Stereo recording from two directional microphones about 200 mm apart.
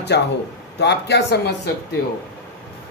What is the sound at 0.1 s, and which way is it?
Speech, 60° left (ahead or behind).